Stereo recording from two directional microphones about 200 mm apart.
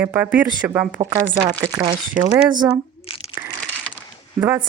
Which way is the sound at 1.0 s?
20° right (ahead or behind).